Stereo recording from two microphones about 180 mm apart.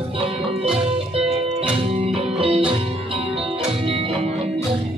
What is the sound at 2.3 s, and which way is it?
Music, 30° right (ahead or behind).